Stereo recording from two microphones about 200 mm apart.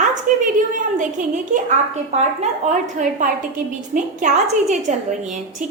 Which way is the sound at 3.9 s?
40° right (ahead or behind).